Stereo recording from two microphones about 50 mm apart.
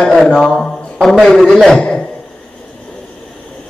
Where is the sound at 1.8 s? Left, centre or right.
Left.